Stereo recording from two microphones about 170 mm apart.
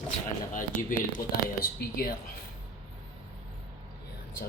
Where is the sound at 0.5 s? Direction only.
50° left (ahead or behind).